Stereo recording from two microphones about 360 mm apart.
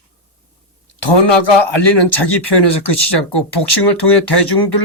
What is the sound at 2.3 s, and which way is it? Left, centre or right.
Speech, left.